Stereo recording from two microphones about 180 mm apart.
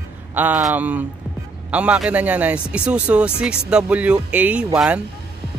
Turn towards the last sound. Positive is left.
turn(degrees=-5)  # may be behind; listen again after turning